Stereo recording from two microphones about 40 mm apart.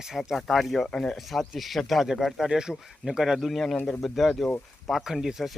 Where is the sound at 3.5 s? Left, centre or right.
Centre.